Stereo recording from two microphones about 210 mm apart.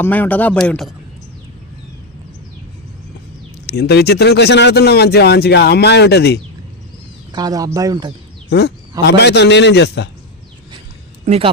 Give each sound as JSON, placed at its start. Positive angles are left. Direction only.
{"t": 0.0, "sound": "speech", "side_deg": 10}
{"t": 3.7, "sound": "speech", "side_deg": 50}
{"t": 7.3, "sound": "speech", "side_deg": -20}
{"t": 8.4, "sound": "speech", "side_deg": 50}
{"t": 11.3, "sound": "speech", "side_deg": -25}